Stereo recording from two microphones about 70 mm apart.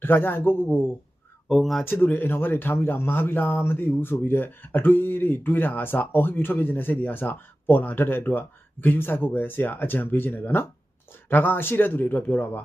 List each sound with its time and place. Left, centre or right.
0.0 s a man's voice: left
1.5 s speech: centre
1.8 s speech: left